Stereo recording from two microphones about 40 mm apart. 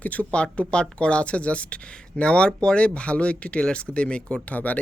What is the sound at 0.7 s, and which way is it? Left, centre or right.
Speech, left.